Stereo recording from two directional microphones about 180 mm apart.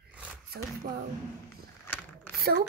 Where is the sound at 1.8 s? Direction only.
10° left (ahead or behind).